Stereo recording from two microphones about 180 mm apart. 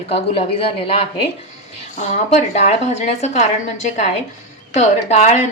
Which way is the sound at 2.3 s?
40° left (ahead or behind).